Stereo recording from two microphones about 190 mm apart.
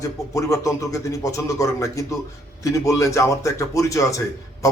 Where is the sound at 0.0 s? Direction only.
15° left (ahead or behind).